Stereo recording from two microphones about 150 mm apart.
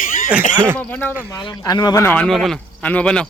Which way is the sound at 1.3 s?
25° left (ahead or behind).